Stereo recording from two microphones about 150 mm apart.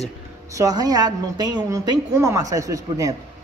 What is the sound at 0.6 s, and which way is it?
A woman's voice, 25° right (ahead or behind).